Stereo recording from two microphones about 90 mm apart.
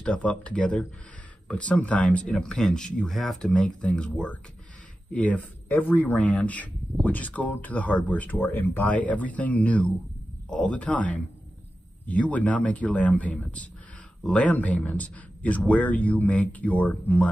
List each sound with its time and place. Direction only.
0.0 s speech: 10° left (ahead or behind)